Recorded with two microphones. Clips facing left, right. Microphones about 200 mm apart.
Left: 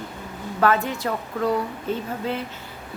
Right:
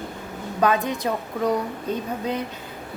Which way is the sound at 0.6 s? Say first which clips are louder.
Even; 15° right (ahead or behind).